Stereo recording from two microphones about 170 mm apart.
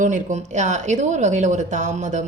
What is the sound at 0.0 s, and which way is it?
A woman's voice, 45° right (ahead or behind).